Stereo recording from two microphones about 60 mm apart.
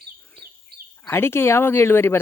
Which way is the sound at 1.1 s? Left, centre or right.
Left.